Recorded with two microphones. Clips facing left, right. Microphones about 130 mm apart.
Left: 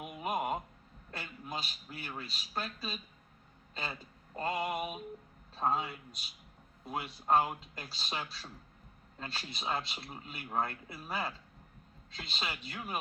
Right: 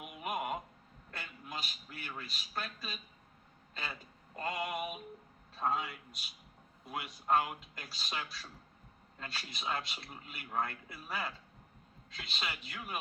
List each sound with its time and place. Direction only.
0.0 s a sound: 30° left (ahead or behind)
1.1 s a man's voice: 30° left (ahead or behind)
4.4 s speech: 30° left (ahead or behind)